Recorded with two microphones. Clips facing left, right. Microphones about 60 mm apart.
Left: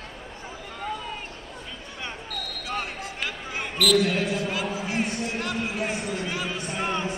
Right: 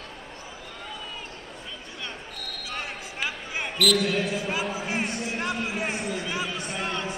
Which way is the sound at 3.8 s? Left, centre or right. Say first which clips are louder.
Left 2 dB; centre.